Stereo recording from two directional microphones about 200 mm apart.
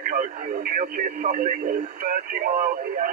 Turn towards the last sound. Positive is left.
turn(degrees=-45)  # may be behind; listen again after turning